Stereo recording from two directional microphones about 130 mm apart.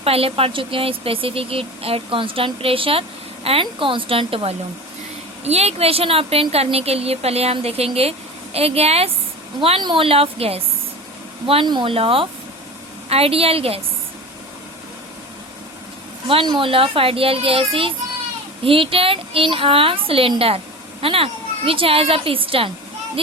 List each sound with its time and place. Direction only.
0.0 s speech: 50° right (ahead or behind)
16.2 s speech: 40° right (ahead or behind)